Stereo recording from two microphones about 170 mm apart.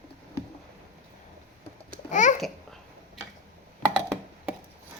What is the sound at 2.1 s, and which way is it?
Babbling, 45° left (ahead or behind).